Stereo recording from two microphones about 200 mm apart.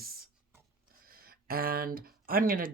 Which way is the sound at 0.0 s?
50° right (ahead or behind).